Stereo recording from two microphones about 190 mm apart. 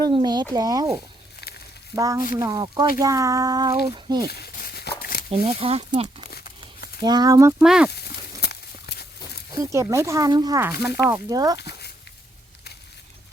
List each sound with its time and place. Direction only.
0.0 s speech: 20° right (ahead or behind)
2.0 s speech: 15° right (ahead or behind)
4.3 s a sound: 55° left (ahead or behind)
5.3 s speech: 30° right (ahead or behind)
7.6 s speech: 5° right (ahead or behind)
7.9 s a sound: 60° left (ahead or behind)
9.6 s speech: 15° right (ahead or behind)